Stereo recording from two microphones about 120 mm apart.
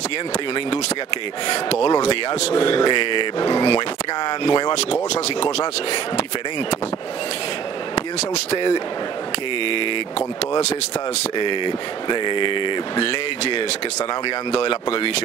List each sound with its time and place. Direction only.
1.5 s speech: 60° left (ahead or behind)
2.6 s speech: 45° left (ahead or behind)
5.4 s speech: 60° left (ahead or behind)
7.9 s speech: 55° left (ahead or behind)
11.3 s speech: 45° left (ahead or behind)
14.2 s speech: 55° left (ahead or behind)